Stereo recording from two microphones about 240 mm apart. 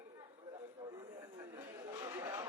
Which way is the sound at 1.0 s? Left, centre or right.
Centre.